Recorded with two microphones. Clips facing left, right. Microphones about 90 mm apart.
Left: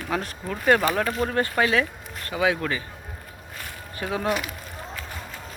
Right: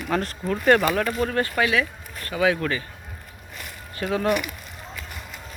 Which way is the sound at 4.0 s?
15° left (ahead or behind).